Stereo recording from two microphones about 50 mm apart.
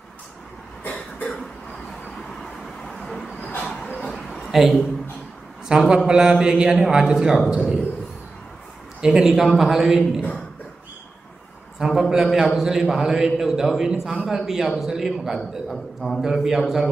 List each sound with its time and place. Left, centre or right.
0.8 s cough: left
2.4 s vehicle: centre
4.5 s speech: centre
5.7 s a man's voice: centre
9.0 s a man's voice: centre
11.8 s a man's voice: centre
15.7 s a man's voice: centre
16.2 s a man's voice: centre